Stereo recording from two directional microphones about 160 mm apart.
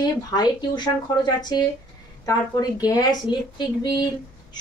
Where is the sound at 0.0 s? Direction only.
25° left (ahead or behind).